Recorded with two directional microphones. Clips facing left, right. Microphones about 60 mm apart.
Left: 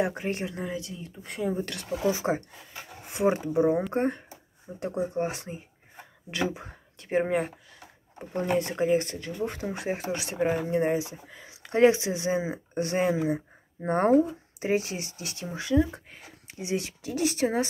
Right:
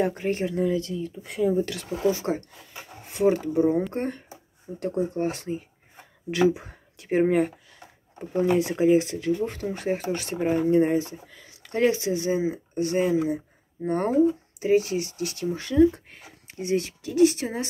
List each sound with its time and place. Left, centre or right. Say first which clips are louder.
0.0 s speech: right 3 dB; centre
0.7 s speech: right 9 dB; centre
2.0 s speech: right 2 dB; centre
6.3 s speech: right 8 dB; centre
9.4 s speech: right 3 dB; centre
11.2 s speech: left 3 dB; left
15.5 s speech: right 5 dB; centre; by 17.6 s left